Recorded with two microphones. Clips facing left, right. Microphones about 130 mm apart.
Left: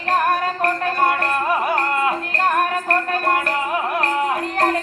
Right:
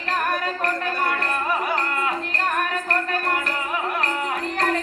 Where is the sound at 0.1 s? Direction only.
40° left (ahead or behind).